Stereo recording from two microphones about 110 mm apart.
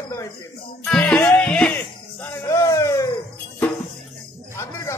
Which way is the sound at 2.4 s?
30° left (ahead or behind).